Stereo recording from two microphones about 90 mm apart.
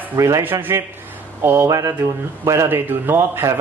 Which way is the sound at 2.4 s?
30° right (ahead or behind).